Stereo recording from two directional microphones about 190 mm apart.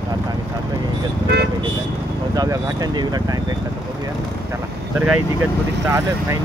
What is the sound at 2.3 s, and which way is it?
Speech, 20° right (ahead or behind).